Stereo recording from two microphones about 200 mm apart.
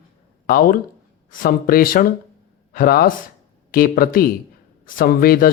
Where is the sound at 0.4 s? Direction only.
45° left (ahead or behind).